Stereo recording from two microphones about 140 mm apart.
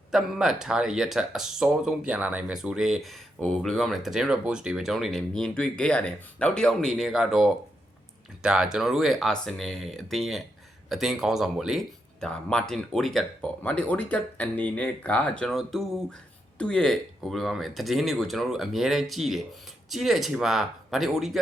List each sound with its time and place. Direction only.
0.1 s speech: 5° right (ahead or behind)